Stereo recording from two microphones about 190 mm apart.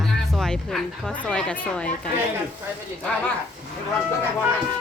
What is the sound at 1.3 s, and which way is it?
Speech, 5° left (ahead or behind).